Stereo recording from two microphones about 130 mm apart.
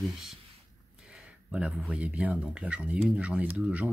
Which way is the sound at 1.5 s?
5° right (ahead or behind).